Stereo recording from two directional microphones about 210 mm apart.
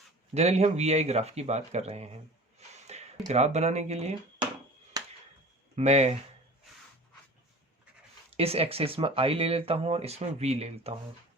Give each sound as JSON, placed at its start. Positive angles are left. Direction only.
{"t": 0.3, "sound": "speech", "side_deg": -30}
{"t": 2.6, "sound": "a sound", "side_deg": -30}
{"t": 5.7, "sound": "speech", "side_deg": -30}
{"t": 8.3, "sound": "speech", "side_deg": -30}